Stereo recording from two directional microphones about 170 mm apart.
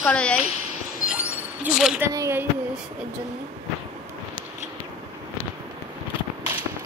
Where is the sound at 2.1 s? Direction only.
15° right (ahead or behind).